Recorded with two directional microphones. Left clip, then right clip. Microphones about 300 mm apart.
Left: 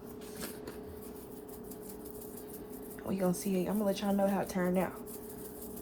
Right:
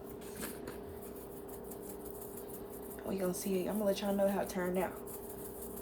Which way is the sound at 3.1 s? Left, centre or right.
Centre.